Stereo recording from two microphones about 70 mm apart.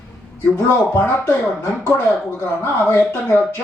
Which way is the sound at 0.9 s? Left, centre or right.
Left.